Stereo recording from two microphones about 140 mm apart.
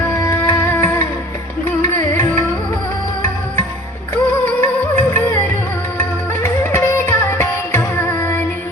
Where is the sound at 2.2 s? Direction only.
15° left (ahead or behind).